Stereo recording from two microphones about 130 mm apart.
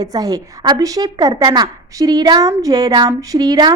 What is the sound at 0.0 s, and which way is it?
A woman's voice, 30° right (ahead or behind).